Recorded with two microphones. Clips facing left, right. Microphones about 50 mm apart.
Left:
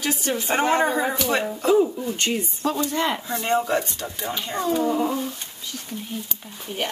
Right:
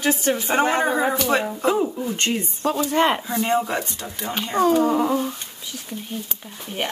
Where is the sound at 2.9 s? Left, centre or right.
Right.